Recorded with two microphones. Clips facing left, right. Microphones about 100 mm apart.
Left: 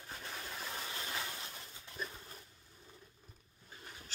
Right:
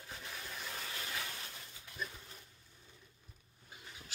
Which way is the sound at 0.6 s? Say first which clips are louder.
Left 1 dB; 30° left (ahead or behind).